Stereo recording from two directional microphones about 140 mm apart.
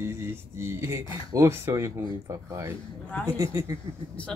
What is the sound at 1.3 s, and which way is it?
Speech, 20° right (ahead or behind).